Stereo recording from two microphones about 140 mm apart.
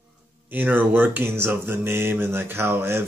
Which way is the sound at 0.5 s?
10° right (ahead or behind).